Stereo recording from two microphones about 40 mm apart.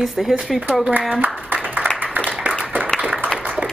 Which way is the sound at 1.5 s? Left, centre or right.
Right.